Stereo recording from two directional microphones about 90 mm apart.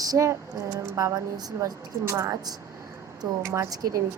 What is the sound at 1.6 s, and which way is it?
Speech, 30° right (ahead or behind).